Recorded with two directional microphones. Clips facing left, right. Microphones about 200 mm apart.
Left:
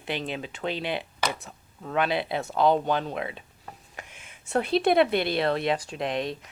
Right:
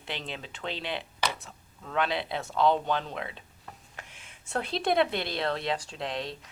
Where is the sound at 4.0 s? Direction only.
5° left (ahead or behind).